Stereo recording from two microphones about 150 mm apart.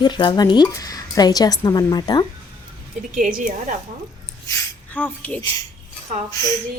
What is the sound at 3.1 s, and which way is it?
Speech, 60° right (ahead or behind).